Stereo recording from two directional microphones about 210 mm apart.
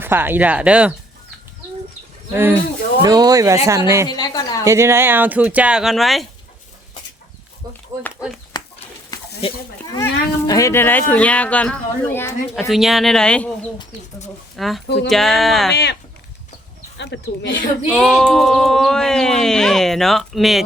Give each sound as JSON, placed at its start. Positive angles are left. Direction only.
{"t": 0.0, "sound": "speech", "side_deg": -10}
{"t": 2.3, "sound": "speech", "side_deg": -10}
{"t": 4.1, "sound": "a woman's voice", "side_deg": 20}
{"t": 4.6, "sound": "speech", "side_deg": -15}
{"t": 7.6, "sound": "speech", "side_deg": -15}
{"t": 8.5, "sound": "a sound", "side_deg": 20}
{"t": 9.4, "sound": "speech", "side_deg": 15}
{"t": 14.5, "sound": "speech", "side_deg": 0}
{"t": 15.7, "sound": "speech", "side_deg": 50}
{"t": 17.0, "sound": "speech", "side_deg": 55}
{"t": 17.8, "sound": "speech", "side_deg": 0}